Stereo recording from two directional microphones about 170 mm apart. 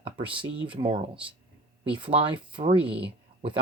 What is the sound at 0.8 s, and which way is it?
Speech, 30° right (ahead or behind).